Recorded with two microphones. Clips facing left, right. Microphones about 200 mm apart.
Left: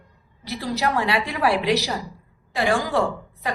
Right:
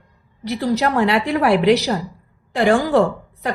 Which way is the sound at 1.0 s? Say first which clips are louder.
Right 5 dB; 55° right (ahead or behind).